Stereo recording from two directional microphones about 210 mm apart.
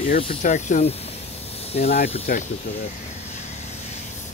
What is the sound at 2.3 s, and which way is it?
Speech, 45° left (ahead or behind).